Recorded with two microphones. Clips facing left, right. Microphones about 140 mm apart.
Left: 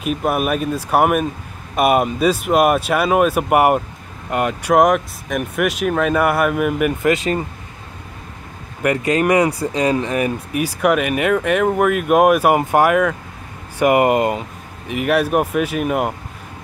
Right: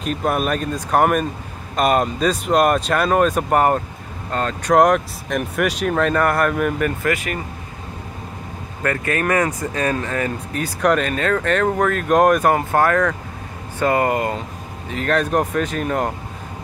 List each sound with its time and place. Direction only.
0.0 s speech: 5° left (ahead or behind)
7.0 s speech: 25° left (ahead or behind)
8.8 s speech: 15° left (ahead or behind)